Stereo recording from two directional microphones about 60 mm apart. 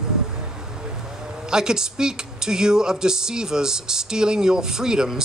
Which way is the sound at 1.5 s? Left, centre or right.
Centre.